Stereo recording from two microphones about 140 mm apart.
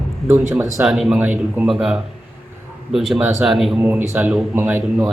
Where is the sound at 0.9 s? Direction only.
Centre (ahead or behind).